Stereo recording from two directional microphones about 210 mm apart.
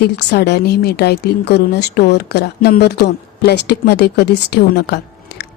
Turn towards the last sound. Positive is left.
turn(degrees=50)  # may be behind; listen again after turning